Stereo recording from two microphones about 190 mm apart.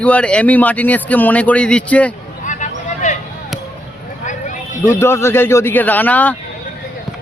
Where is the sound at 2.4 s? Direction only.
40° left (ahead or behind).